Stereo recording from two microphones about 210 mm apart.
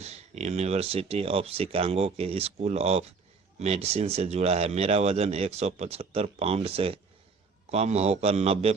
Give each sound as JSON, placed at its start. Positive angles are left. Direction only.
{"t": 0.0, "sound": "a man's voice", "side_deg": -30}